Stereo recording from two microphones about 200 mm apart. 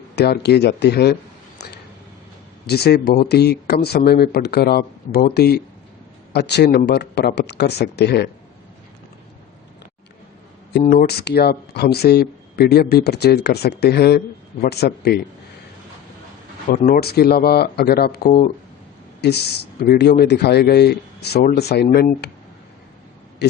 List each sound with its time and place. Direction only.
0.2 s speech: 55° left (ahead or behind)
2.6 s speech: 55° left (ahead or behind)
10.7 s speech: 55° left (ahead or behind)
16.7 s speech: 45° left (ahead or behind)
23.4 s speech: 55° left (ahead or behind)